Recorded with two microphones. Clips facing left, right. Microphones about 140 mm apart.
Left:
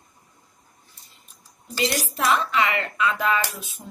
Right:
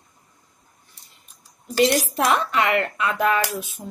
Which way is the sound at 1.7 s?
55° right (ahead or behind).